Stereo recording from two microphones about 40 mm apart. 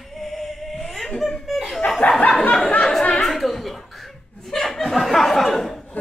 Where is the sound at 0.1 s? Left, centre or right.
Centre.